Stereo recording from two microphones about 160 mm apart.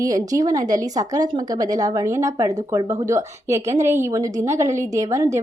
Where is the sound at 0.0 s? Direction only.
20° right (ahead or behind).